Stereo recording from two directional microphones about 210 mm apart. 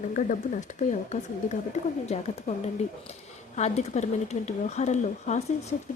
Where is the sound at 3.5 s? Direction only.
30° left (ahead or behind).